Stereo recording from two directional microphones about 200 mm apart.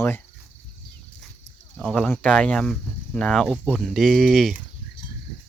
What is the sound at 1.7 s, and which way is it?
Speech, 5° left (ahead or behind).